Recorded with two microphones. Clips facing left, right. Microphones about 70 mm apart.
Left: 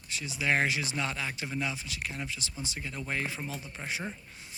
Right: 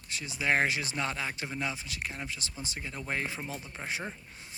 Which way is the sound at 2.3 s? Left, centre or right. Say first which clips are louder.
Left 1 dB; right.